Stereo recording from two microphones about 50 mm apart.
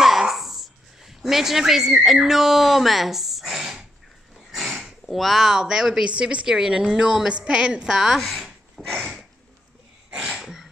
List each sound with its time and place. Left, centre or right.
0.0 s speech: centre
4.5 s a sound: centre
5.0 s speech: centre
6.0 s speech: right
8.0 s a sound: centre
10.1 s sneeze: centre